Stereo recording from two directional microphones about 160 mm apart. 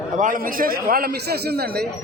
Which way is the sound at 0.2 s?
60° right (ahead or behind).